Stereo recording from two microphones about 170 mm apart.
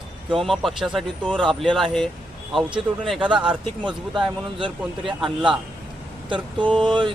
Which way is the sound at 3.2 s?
30° right (ahead or behind).